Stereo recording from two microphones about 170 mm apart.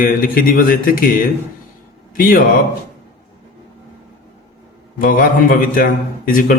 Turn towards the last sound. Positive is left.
turn(degrees=55)  # may be behind; listen again after turning